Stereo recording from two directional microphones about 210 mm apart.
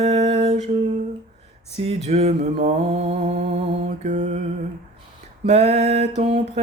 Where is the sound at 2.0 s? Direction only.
30° right (ahead or behind).